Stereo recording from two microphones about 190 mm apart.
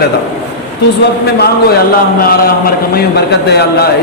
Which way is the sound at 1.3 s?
55° left (ahead or behind).